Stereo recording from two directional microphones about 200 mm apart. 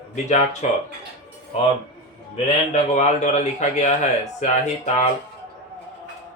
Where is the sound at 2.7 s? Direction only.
35° left (ahead or behind).